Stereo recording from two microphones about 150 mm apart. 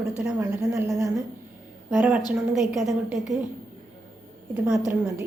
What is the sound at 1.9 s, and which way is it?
A woman's voice, 10° right (ahead or behind).